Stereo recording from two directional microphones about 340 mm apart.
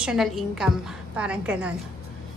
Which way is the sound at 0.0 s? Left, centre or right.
Centre.